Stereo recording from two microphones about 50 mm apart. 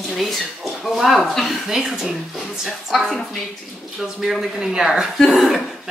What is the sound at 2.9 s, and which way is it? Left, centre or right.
Speech, centre.